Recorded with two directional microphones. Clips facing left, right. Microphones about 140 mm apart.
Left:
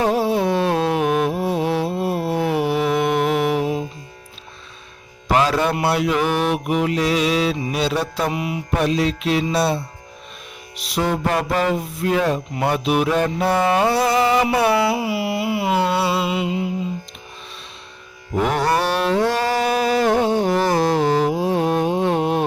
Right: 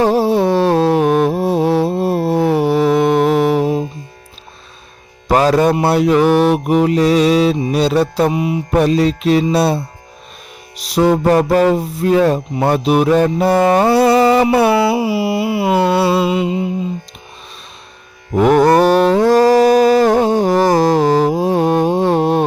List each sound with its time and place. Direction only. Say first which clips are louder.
0.0 s music: right 5 dB; 35° right (ahead or behind)
5.3 s mantra: right 6 dB; 40° right (ahead or behind); by 8.6 s 25° right (ahead or behind)
8.8 s mantra: right 6 dB; 40° right (ahead or behind)
13.6 s music: right 6 dB; 40° right (ahead or behind)
18.3 s mantra: right 9 dB; 45° right (ahead or behind)